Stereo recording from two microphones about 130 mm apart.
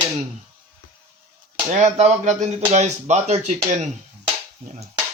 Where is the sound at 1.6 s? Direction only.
60° right (ahead or behind).